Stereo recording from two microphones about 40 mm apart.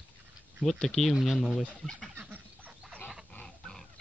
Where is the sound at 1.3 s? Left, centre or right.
Centre.